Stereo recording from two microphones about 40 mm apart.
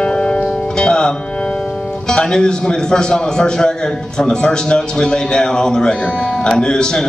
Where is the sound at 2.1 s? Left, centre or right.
Centre.